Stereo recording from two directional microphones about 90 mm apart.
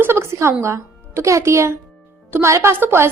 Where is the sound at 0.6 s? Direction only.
30° right (ahead or behind).